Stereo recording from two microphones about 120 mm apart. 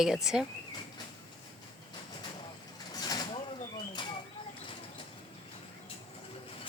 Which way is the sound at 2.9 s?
35° left (ahead or behind).